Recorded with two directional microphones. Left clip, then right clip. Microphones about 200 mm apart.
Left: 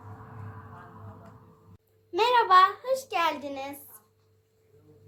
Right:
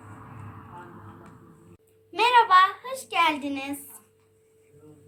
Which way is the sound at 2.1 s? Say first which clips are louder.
Right 3 dB; 55° left (ahead or behind).